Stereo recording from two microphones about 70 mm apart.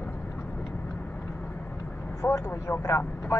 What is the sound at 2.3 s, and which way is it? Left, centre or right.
Speech, left.